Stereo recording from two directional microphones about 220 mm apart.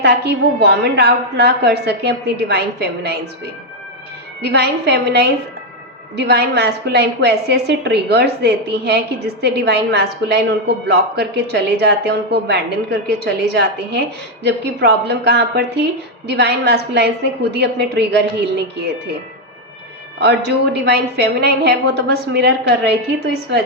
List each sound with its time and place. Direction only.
0.0 s a woman's voice: 50° right (ahead or behind)
4.4 s a woman's voice: 50° right (ahead or behind)
20.7 s a woman's voice: 50° right (ahead or behind)